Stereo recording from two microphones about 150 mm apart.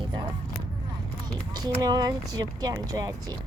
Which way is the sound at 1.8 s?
25° right (ahead or behind).